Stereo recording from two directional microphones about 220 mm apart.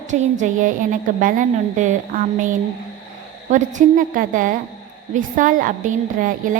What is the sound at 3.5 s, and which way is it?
A woman's voice, 35° right (ahead or behind).